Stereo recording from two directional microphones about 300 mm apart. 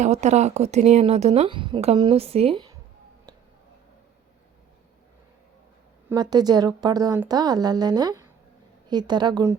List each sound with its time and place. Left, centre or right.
0.0 s speech: right
6.1 s a woman's voice: centre